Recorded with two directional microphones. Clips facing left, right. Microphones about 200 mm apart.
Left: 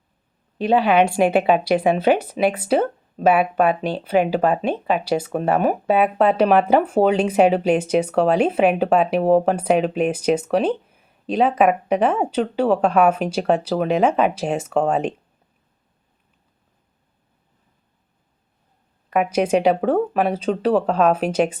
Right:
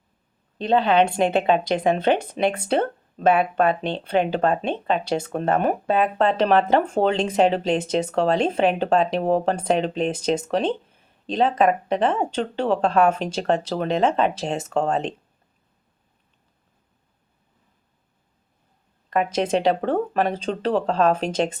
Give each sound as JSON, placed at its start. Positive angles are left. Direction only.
{"t": 0.6, "sound": "speech", "side_deg": 10}
{"t": 19.1, "sound": "speech", "side_deg": 10}